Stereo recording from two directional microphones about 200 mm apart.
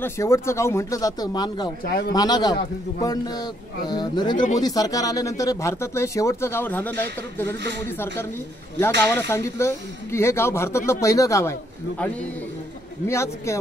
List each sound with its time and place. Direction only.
0.0 s speech: 15° left (ahead or behind)
1.9 s speech: 45° left (ahead or behind)
2.1 s a man's voice: 20° left (ahead or behind)
8.7 s speech: 10° left (ahead or behind)
13.0 s speech: 15° left (ahead or behind)